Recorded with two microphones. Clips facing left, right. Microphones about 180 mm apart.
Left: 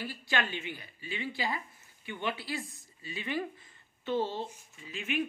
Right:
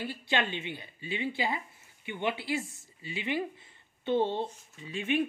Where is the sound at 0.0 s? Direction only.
20° right (ahead or behind).